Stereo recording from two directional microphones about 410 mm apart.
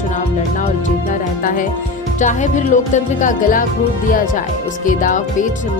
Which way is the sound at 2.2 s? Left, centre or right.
Centre.